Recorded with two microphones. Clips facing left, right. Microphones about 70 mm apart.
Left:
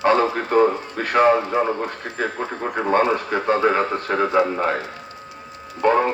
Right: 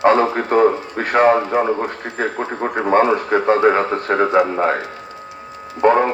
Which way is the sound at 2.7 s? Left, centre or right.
Right.